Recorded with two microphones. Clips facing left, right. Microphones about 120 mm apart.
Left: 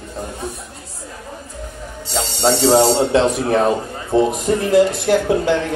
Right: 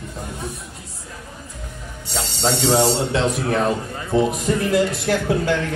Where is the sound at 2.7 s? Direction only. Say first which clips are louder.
Left 5 dB; 35° left (ahead or behind).